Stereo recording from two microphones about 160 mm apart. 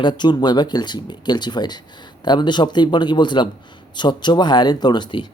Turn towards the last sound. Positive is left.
turn(degrees=30)  # may be behind; listen again after turning